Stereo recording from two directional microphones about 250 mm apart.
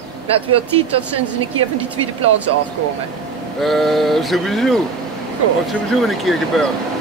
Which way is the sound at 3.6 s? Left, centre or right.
Centre.